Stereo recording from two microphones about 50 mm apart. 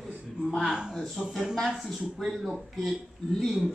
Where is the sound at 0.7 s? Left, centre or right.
Centre.